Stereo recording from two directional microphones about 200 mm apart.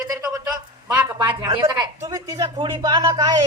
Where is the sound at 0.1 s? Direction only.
15° right (ahead or behind).